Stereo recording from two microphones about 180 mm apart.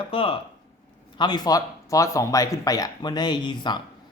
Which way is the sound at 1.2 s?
25° left (ahead or behind).